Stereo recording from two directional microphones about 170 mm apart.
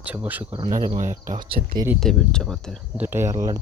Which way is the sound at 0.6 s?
20° right (ahead or behind).